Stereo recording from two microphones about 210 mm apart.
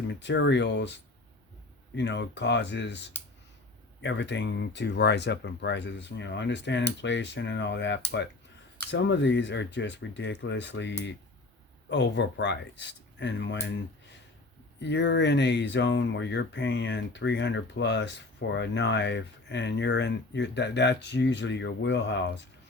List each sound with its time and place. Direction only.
0.1 s speech: 55° left (ahead or behind)
2.0 s speech: 55° left (ahead or behind)
4.0 s speech: 55° left (ahead or behind)
14.8 s speech: 55° left (ahead or behind)